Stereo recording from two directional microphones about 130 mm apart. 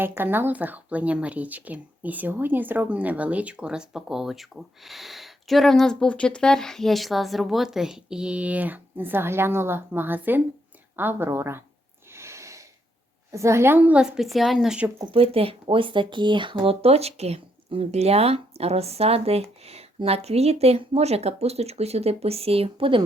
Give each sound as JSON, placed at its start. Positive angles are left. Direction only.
{"t": 0.0, "sound": "speech", "side_deg": -15}
{"t": 12.1, "sound": "a sound", "side_deg": -20}
{"t": 13.3, "sound": "speech", "side_deg": -20}
{"t": 15.0, "sound": "speech", "side_deg": -45}
{"t": 16.6, "sound": "speech", "side_deg": -50}